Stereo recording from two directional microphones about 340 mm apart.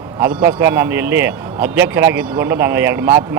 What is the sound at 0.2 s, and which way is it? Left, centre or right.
A man's voice, centre.